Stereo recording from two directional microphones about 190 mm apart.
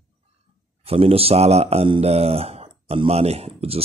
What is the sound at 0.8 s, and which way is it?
Speech, 30° right (ahead or behind).